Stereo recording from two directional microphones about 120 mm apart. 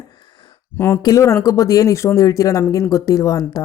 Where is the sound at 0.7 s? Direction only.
20° left (ahead or behind).